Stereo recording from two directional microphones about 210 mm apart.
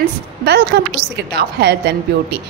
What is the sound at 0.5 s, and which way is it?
A woman's voice, 50° right (ahead or behind).